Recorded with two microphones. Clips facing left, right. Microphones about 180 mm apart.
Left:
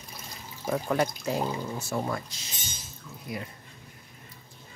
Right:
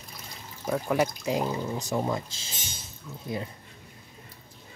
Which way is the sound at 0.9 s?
10° right (ahead or behind).